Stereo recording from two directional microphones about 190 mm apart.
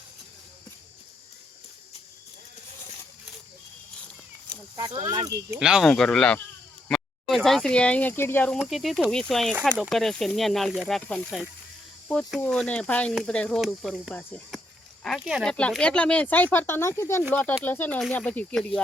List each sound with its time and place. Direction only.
4.8 s speech: 35° right (ahead or behind)
5.0 s speech: 20° right (ahead or behind)
5.5 s speech: 5° right (ahead or behind)